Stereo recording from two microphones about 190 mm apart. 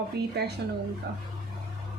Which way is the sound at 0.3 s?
60° right (ahead or behind).